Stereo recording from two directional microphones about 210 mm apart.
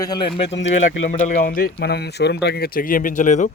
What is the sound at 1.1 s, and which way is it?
Speech, 40° left (ahead or behind).